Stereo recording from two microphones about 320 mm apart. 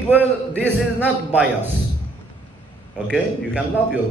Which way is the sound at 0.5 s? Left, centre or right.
Centre.